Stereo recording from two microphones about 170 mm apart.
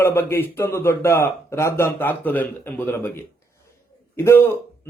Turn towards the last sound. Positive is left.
turn(degrees=15)  # may be behind; listen again after turning